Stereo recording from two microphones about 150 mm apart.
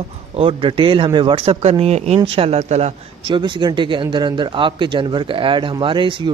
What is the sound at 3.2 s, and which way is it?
A man's voice, 30° right (ahead or behind).